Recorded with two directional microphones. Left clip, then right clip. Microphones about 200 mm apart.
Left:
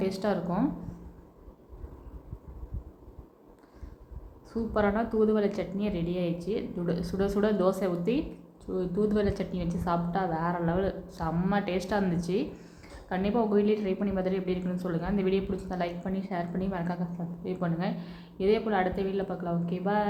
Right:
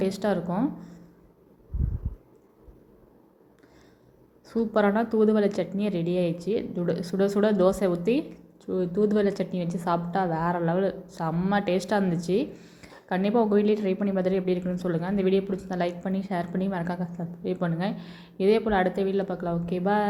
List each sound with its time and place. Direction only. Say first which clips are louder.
0.0 s a woman's voice: right 3 dB; 20° right (ahead or behind)
4.5 s a woman's voice: right 4 dB; 25° right (ahead or behind)